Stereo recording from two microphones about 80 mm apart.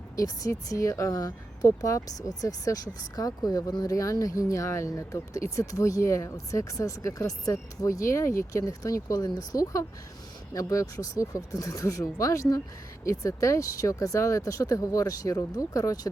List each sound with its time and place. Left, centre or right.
0.2 s speech: left